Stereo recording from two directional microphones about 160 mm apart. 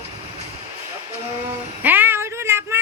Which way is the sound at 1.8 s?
10° right (ahead or behind).